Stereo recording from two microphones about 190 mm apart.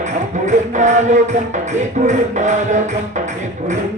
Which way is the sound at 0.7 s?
40° right (ahead or behind).